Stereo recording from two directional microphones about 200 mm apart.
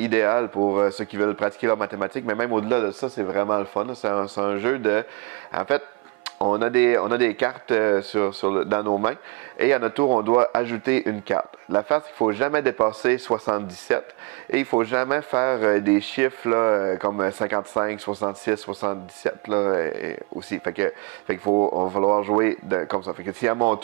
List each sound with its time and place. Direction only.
0.0 s speech: 15° right (ahead or behind)
6.6 s speech: 10° right (ahead or behind)
21.5 s speech: 30° right (ahead or behind)